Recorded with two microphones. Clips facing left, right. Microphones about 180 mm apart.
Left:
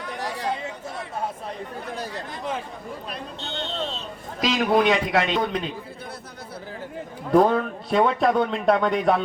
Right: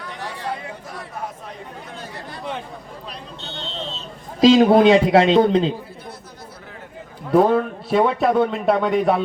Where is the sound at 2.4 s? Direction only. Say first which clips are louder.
Even; centre (ahead or behind).